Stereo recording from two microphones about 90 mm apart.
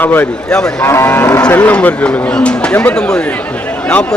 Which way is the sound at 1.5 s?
15° left (ahead or behind).